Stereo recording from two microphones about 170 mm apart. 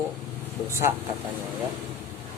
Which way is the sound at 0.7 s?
15° right (ahead or behind).